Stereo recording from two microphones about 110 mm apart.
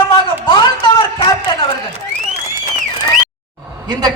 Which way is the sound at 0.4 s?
40° left (ahead or behind).